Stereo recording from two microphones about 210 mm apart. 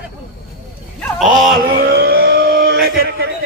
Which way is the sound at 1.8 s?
50° right (ahead or behind).